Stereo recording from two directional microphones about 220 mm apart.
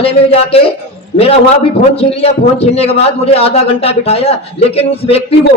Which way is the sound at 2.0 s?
25° left (ahead or behind).